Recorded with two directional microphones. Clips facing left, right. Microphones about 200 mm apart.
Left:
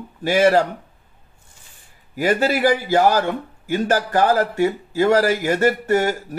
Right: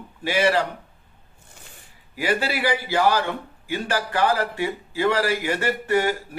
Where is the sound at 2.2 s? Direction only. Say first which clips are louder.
Left 6 dB; 45° left (ahead or behind).